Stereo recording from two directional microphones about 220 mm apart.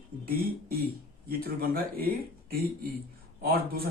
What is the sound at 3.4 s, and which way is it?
Speech, 40° right (ahead or behind).